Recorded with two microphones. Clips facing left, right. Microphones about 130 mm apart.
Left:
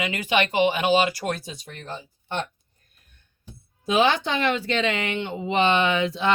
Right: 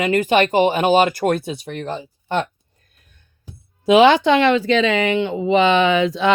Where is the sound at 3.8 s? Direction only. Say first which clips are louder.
Right 9 dB; 85° right.